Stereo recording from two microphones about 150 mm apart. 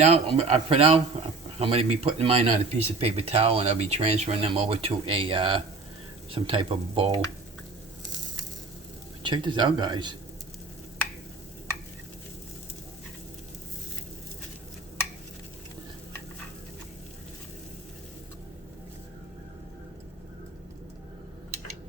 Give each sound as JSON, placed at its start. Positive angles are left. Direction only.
{"t": 0.0, "sound": "speech", "side_deg": -45}
{"t": 9.2, "sound": "speech", "side_deg": -30}